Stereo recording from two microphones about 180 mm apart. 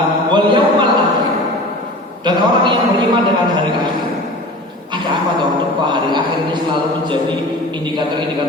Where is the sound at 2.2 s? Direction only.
25° right (ahead or behind).